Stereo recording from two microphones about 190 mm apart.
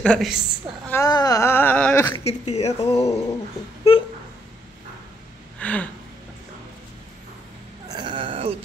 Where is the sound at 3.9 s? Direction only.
30° left (ahead or behind).